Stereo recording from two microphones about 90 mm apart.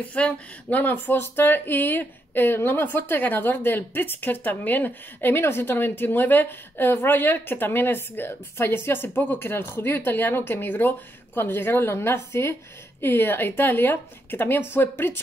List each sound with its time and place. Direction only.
0.1 s speech: 15° left (ahead or behind)